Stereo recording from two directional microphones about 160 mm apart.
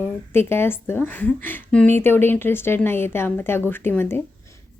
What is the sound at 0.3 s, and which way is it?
A woman's voice, 15° left (ahead or behind).